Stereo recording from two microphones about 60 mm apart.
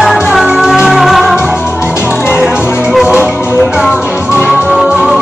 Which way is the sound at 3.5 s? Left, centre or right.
Centre.